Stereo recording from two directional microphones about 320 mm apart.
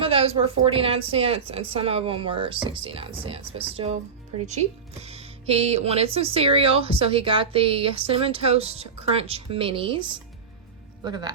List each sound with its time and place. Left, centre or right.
0.0 s speech: centre
5.0 s speech: centre